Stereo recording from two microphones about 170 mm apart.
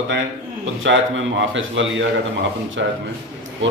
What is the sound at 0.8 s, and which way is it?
Speech, 90° right.